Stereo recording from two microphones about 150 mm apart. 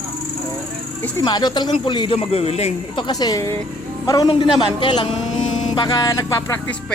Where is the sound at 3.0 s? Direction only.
25° left (ahead or behind).